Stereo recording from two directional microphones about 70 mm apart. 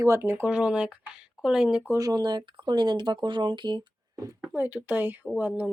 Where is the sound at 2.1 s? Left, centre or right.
Right.